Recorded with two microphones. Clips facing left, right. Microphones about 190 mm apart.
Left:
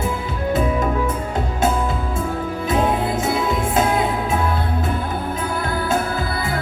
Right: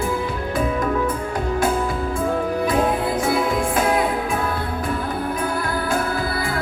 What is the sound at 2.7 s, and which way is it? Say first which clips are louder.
Music: left 3 dB; 25° left (ahead or behind).